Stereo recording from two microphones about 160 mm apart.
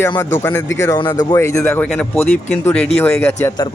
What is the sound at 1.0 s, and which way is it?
Speech, 25° left (ahead or behind).